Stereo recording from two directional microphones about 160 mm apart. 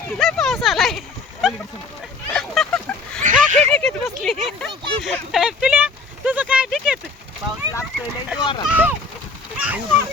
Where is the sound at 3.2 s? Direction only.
45° right (ahead or behind).